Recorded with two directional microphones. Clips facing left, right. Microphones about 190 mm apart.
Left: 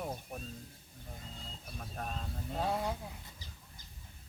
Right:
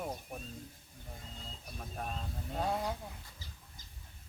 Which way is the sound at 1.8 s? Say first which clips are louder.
Even; 5° right (ahead or behind).